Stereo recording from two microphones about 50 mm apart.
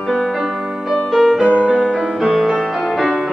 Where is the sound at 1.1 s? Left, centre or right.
Centre.